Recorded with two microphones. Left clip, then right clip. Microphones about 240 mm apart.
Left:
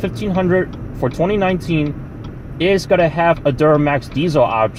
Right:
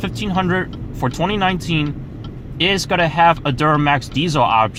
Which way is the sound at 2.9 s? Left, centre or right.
Right.